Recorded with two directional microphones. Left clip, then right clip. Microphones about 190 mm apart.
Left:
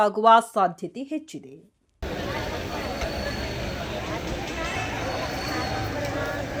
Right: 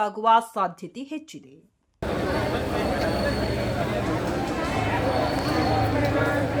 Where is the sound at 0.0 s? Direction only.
25° left (ahead or behind).